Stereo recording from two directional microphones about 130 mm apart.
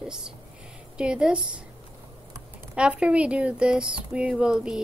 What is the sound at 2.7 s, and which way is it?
Speech, 5° right (ahead or behind).